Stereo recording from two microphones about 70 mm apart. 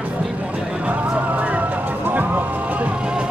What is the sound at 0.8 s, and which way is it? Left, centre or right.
Music, right.